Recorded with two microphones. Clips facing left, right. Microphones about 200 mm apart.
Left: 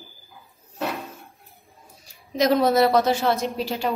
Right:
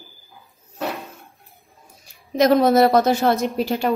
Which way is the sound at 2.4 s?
45° right (ahead or behind).